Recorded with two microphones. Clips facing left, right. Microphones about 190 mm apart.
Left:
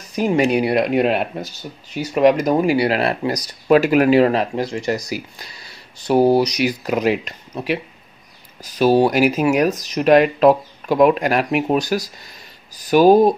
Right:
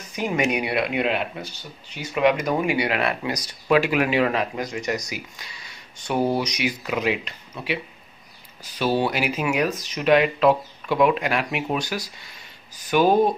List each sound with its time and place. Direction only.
0.1 s speech: 35° left (ahead or behind)